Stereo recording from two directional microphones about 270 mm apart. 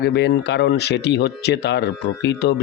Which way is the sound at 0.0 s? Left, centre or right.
Left.